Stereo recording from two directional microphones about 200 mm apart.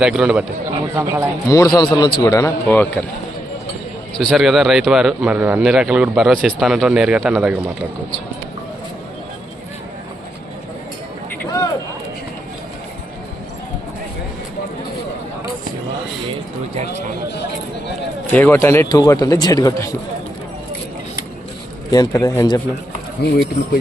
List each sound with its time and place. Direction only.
0.0 s a man's voice: 5° right (ahead or behind)
0.9 s a man's voice: 15° right (ahead or behind)
1.5 s a man's voice: 20° left (ahead or behind)
4.2 s a man's voice: centre (ahead or behind)
16.7 s run: 35° right (ahead or behind)
18.3 s a man's voice: 10° left (ahead or behind)
21.8 s speech: 20° left (ahead or behind)